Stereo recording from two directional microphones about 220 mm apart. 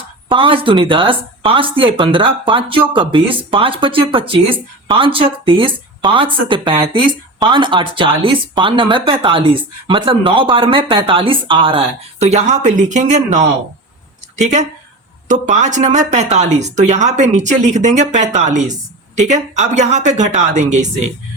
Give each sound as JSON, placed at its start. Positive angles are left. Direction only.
{"t": 0.3, "sound": "speech", "side_deg": -20}